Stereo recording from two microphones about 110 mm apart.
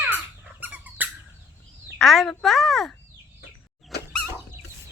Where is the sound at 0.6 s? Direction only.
15° right (ahead or behind).